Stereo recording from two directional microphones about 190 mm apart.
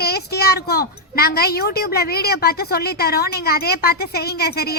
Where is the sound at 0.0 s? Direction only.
55° left (ahead or behind).